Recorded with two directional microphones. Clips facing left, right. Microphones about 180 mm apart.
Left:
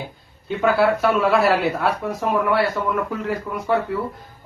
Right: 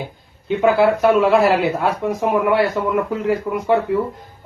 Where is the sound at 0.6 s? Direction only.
15° right (ahead or behind).